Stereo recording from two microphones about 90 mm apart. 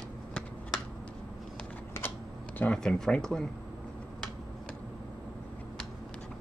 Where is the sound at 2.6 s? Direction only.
10° left (ahead or behind).